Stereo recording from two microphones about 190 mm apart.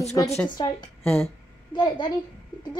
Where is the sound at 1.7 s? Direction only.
20° left (ahead or behind).